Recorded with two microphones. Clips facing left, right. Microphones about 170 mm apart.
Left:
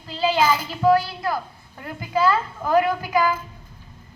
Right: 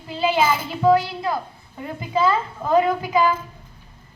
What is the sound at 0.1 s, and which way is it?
Child singing, 20° right (ahead or behind).